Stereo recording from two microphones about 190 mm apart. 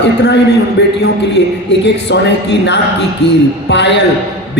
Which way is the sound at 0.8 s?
65° left (ahead or behind).